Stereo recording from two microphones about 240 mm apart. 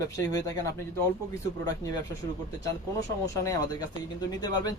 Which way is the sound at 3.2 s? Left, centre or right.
Centre.